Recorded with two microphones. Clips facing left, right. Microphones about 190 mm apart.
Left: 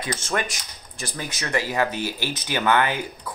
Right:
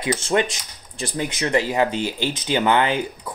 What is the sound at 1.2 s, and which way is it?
Speech, 20° right (ahead or behind).